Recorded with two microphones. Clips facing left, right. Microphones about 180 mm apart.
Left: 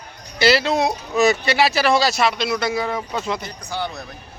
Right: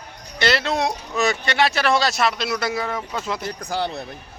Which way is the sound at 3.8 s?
30° right (ahead or behind).